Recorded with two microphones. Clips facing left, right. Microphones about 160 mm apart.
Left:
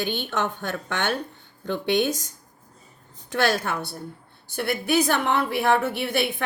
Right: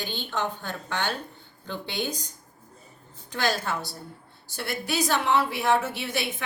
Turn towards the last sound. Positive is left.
turn(degrees=55)  # may be behind; listen again after turning